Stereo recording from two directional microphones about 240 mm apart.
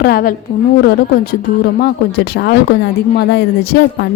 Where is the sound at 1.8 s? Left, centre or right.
Left.